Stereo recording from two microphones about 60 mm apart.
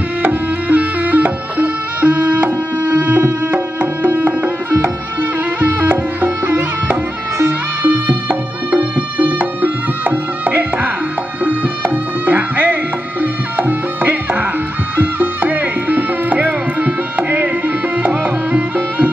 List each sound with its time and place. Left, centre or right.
0.2 s music: right
5.6 s music: right
7.8 s music: right